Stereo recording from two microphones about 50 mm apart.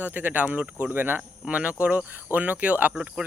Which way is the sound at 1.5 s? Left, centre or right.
Right.